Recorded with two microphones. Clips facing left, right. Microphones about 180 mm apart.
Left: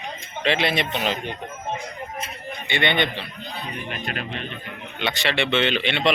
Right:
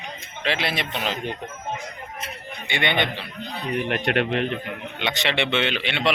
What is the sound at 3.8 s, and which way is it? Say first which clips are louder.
Speech: right 11 dB; 75° right (ahead or behind).